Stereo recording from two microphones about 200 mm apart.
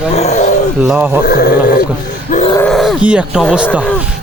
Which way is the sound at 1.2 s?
45° left (ahead or behind).